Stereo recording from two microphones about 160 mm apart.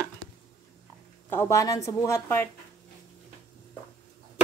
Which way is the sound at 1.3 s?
15° left (ahead or behind).